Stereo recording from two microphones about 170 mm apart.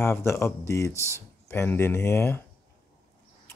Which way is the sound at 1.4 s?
15° left (ahead or behind).